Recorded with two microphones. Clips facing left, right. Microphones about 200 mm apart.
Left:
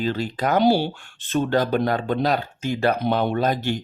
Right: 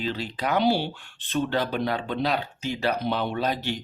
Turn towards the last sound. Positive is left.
turn(degrees=50)  # may be behind; listen again after turning